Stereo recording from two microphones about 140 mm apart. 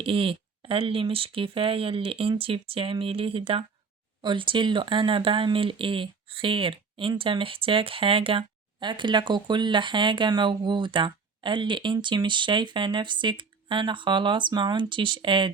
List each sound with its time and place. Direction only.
0.0 s speech: 40° right (ahead or behind)